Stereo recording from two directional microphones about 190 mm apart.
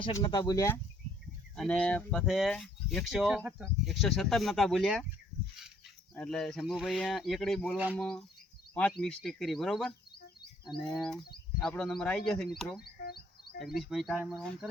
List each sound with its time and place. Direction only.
0.0 s speech: 25° left (ahead or behind)
1.5 s speech: 5° left (ahead or behind)
6.1 s speech: 5° left (ahead or behind)
11.0 s speech: centre (ahead or behind)
12.8 s music: 55° left (ahead or behind)
13.7 s speech: centre (ahead or behind)